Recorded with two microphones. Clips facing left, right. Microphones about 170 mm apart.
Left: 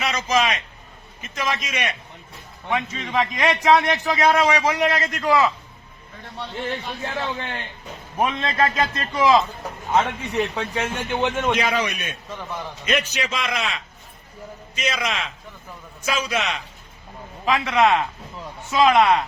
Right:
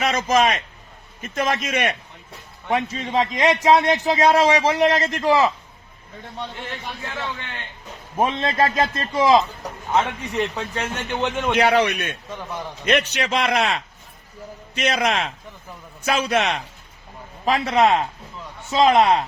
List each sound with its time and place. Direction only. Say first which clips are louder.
0.0 s a man's voice: right 3 dB; 50° right (ahead or behind)
2.6 s a man's voice: right 3 dB; 35° right (ahead or behind)
3.2 s a man's voice: right 2 dB; 25° right (ahead or behind)
8.1 s a man's voice: right 2 dB; 25° right (ahead or behind)
9.9 s a man's voice: left 1 dB; 5° left (ahead or behind)
11.5 s a man's voice: right 5 dB; 60° right (ahead or behind)
12.3 s a man's voice: right 1 dB; 10° right (ahead or behind)
12.8 s a man's voice: right 4 dB; 60° right (ahead or behind)
17.4 s a man's voice: right 1 dB; 35° right (ahead or behind)